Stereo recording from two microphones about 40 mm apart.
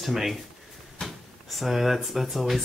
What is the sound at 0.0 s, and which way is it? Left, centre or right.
Speech, centre.